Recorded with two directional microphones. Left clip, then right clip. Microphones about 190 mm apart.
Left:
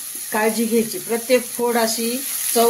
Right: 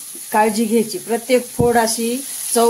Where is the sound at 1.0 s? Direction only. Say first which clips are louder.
Right 1 dB; 50° right (ahead or behind).